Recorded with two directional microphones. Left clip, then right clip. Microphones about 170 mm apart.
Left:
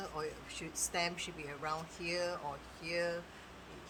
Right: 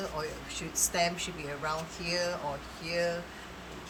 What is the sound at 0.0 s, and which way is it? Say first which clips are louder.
Speech: right 6 dB; 40° left (ahead or behind).